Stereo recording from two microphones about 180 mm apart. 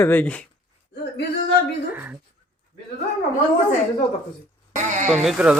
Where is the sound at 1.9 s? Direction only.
10° right (ahead or behind).